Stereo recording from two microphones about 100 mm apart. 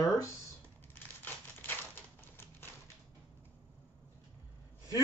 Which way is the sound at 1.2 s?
20° left (ahead or behind).